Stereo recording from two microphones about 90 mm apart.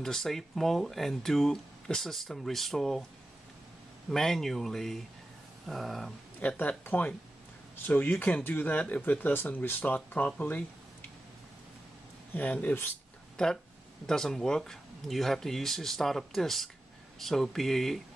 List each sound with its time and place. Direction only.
0.0 s speech: 5° left (ahead or behind)
4.1 s speech: 5° left (ahead or behind)
6.4 s speech: 20° left (ahead or behind)
12.4 s speech: 20° left (ahead or behind)
14.0 s speech: 5° left (ahead or behind)